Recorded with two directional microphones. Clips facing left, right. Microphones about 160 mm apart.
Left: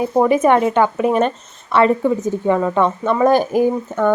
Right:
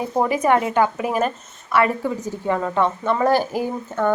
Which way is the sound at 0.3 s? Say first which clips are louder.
Left 4 dB; 25° left (ahead or behind).